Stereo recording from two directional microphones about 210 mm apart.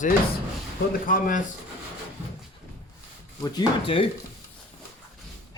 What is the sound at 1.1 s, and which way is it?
Speech, 40° left (ahead or behind).